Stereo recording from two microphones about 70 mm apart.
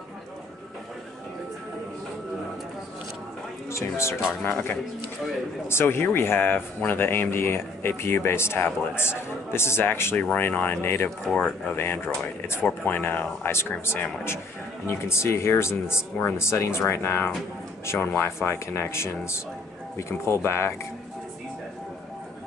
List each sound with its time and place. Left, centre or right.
3.7 s speech: left
4.5 s speech: left
11.2 s speech: centre
11.7 s speech: left